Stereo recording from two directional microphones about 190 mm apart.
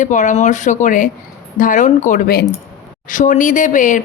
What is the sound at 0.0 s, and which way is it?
A woman's voice, 40° left (ahead or behind).